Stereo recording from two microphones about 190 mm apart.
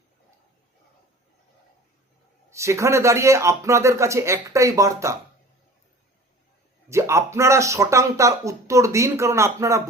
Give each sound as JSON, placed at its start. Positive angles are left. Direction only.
{"t": 2.5, "sound": "speech", "side_deg": -15}
{"t": 6.8, "sound": "speech", "side_deg": -15}